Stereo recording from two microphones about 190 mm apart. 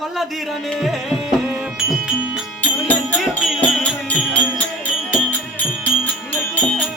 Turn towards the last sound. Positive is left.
turn(degrees=0)  # may be behind; listen again after turning